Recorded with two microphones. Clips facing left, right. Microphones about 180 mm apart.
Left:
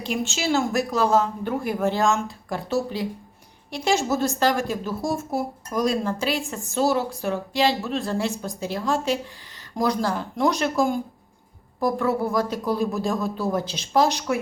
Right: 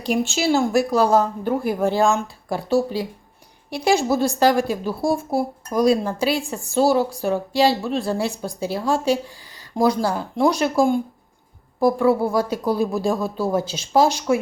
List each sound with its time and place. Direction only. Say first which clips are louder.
0.1 s speech: right 5 dB; 35° right (ahead or behind)